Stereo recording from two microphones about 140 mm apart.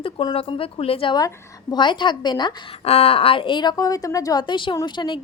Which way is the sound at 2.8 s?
45° left (ahead or behind).